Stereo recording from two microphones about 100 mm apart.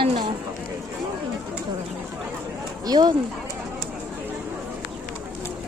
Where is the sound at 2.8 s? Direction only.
45° right (ahead or behind).